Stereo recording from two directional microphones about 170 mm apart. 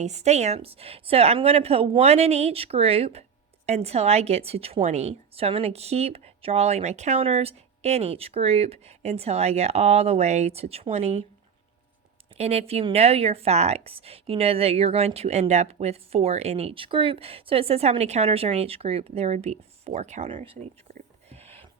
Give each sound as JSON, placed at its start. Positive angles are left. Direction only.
{"t": 0.0, "sound": "speech", "side_deg": -40}
{"t": 12.4, "sound": "speech", "side_deg": -40}
{"t": 21.2, "sound": "a sound", "side_deg": -40}